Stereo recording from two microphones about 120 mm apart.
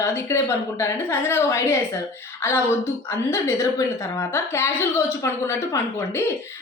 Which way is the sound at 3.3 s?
25° left (ahead or behind).